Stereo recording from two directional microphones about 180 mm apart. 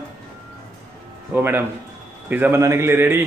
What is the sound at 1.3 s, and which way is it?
A man's voice, 10° right (ahead or behind).